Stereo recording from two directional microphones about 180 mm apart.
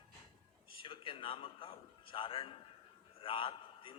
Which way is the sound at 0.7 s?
30° left (ahead or behind).